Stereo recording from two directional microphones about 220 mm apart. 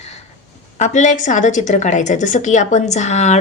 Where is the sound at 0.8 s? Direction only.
35° left (ahead or behind).